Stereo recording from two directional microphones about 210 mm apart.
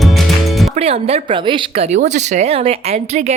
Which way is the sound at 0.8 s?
30° right (ahead or behind).